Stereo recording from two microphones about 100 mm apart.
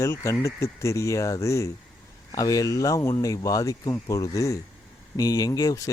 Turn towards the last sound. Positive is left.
turn(degrees=35)  # may be behind; listen again after turning